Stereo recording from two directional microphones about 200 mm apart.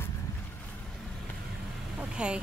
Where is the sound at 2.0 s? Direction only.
5° right (ahead or behind).